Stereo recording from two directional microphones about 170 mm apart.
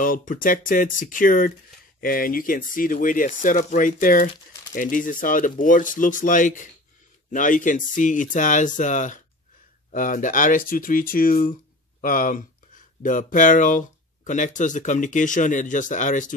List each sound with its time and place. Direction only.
0.0 s speech: 55° left (ahead or behind)